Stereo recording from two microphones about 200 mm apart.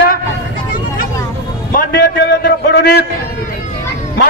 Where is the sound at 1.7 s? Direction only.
50° left (ahead or behind).